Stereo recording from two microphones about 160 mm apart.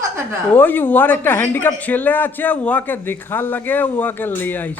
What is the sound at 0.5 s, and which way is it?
Speech, 10° left (ahead or behind).